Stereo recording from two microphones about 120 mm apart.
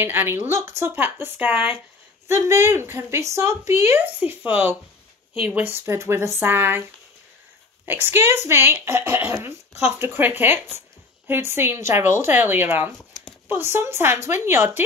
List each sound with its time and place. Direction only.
0.0 s speech: 20° right (ahead or behind)
7.8 s speech: 20° right (ahead or behind)